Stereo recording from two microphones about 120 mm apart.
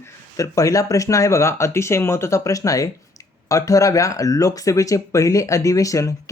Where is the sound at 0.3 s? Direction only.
30° left (ahead or behind).